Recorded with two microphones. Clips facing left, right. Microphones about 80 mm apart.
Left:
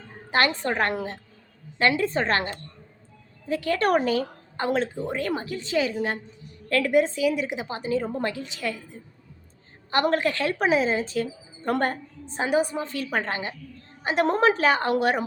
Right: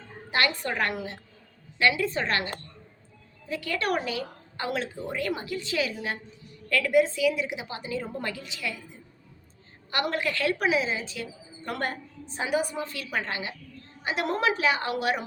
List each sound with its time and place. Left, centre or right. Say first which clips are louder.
0.3 s speech: left 4 dB; left